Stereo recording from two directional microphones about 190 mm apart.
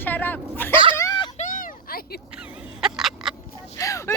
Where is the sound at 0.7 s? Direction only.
25° right (ahead or behind).